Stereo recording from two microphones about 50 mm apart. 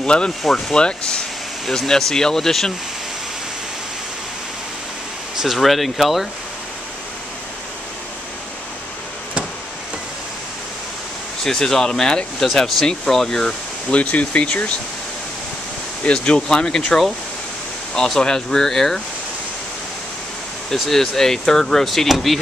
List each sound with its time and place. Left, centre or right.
0.0 s speech: centre
5.3 s speech: centre
5.6 s speech: centre
11.4 s speech: centre
13.9 s speech: left
16.0 s speech: centre
20.7 s speech: centre